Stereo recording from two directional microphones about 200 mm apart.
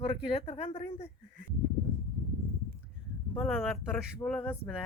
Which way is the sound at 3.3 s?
Centre (ahead or behind).